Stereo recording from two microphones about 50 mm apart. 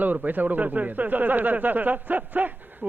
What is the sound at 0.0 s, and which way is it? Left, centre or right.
Speech, right.